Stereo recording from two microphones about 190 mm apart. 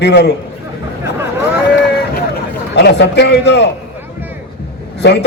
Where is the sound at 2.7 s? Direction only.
65° left (ahead or behind).